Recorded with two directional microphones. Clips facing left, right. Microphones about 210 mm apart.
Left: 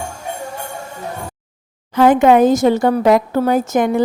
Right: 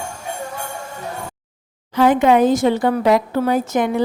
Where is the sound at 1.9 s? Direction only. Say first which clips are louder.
Left 3 dB; 50° left (ahead or behind).